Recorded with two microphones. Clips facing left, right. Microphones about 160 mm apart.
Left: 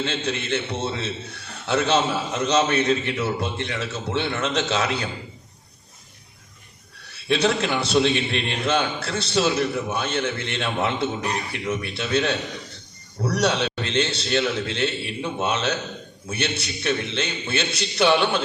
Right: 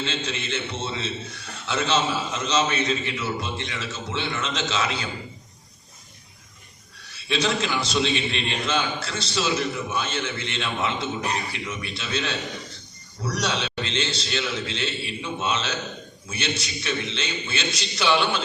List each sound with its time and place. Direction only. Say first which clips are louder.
0.0 s a man's voice: left 3 dB; 55° left (ahead or behind)
7.0 s a man's voice: left 4 dB; 60° left (ahead or behind)